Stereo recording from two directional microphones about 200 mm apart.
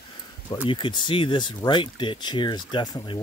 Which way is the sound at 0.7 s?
25° left (ahead or behind).